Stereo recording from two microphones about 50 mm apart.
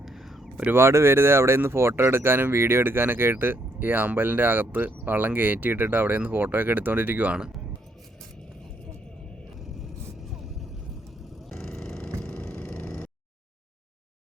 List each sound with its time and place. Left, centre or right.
0.0 s a sound: centre
0.7 s speech: right
11.4 s vehicle: centre